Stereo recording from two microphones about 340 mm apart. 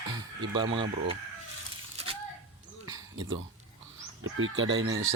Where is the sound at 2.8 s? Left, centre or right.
Centre.